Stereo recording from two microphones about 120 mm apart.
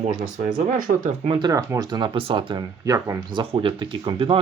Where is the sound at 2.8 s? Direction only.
25° right (ahead or behind).